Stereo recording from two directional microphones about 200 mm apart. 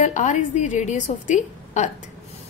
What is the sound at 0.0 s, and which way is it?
A woman's voice, 35° left (ahead or behind).